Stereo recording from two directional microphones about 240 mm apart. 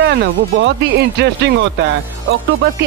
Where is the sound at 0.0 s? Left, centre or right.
Right.